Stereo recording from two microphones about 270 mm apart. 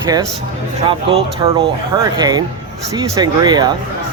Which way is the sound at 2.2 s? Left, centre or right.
Centre.